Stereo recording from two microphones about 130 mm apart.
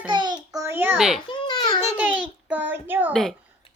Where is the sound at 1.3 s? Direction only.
35° left (ahead or behind).